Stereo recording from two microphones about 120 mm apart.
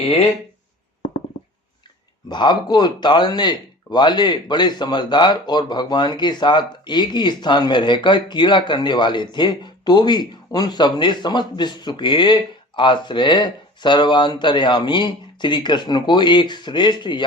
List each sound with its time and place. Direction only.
0.0 s speech: 55° left (ahead or behind)
2.3 s speech: 40° left (ahead or behind)